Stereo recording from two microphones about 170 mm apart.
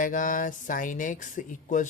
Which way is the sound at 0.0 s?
50° left (ahead or behind).